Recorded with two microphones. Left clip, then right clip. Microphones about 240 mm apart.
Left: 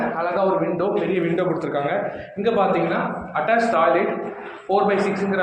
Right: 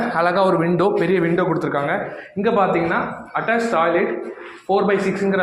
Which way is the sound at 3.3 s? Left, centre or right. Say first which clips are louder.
Left 1 dB; right.